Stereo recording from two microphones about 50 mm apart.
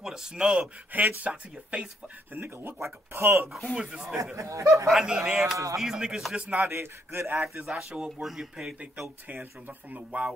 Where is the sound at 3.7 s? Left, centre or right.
Centre.